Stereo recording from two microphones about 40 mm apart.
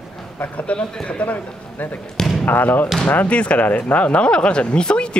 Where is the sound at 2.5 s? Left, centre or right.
Left.